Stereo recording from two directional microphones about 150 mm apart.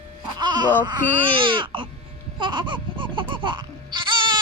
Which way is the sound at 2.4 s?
30° right (ahead or behind).